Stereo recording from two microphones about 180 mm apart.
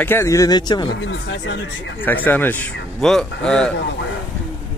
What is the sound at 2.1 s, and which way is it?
Speech, 10° left (ahead or behind).